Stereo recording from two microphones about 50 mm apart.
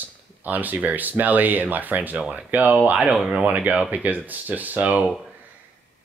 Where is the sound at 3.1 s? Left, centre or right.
Centre.